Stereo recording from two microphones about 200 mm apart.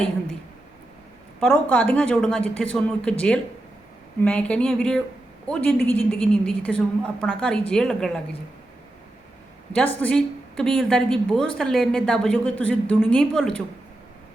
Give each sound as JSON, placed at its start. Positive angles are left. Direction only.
{"t": 1.4, "sound": "a woman's voice", "side_deg": 10}
{"t": 9.7, "sound": "a woman's voice", "side_deg": 5}